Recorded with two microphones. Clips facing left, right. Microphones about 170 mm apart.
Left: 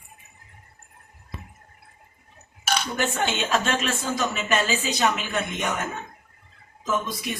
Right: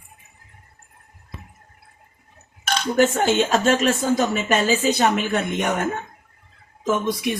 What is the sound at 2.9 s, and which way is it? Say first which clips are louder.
A woman's voice: right 12 dB; 45° right (ahead or behind).